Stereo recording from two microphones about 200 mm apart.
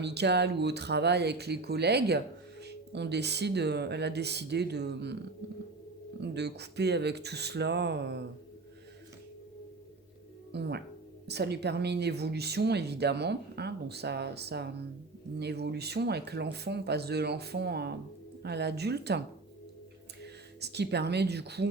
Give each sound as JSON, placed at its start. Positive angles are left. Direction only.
{"t": 0.0, "sound": "speech", "side_deg": -55}
{"t": 6.1, "sound": "speech", "side_deg": -55}
{"t": 10.5, "sound": "speech", "side_deg": -55}
{"t": 20.2, "sound": "speech", "side_deg": -55}